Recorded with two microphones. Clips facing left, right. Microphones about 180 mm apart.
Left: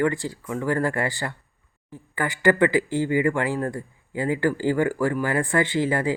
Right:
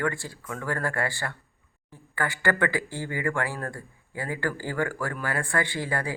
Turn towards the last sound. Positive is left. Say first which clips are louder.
# left 7 dB
turn(degrees=20)  # may be behind; listen again after turning